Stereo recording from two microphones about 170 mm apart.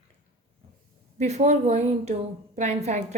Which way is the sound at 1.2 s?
40° right (ahead or behind).